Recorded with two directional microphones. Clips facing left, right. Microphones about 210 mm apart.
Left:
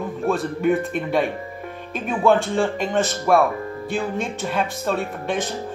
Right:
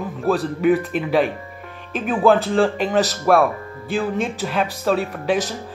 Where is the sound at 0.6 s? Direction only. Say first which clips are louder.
Right 2 dB; 5° right (ahead or behind).